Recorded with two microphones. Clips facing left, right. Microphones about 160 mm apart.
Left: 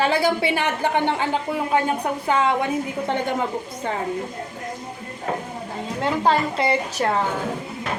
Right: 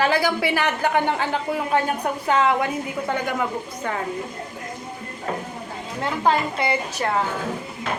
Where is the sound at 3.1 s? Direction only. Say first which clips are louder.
Left 1 dB; 25° left (ahead or behind).